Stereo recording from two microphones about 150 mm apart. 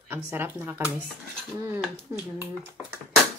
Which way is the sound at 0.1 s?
15° right (ahead or behind).